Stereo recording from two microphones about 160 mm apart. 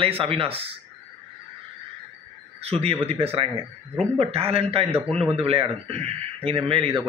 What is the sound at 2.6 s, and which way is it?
Speech, 40° right (ahead or behind).